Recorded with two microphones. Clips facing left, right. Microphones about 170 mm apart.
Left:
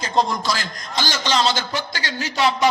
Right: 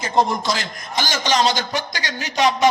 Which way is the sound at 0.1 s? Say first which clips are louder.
Right 2 dB; 20° right (ahead or behind).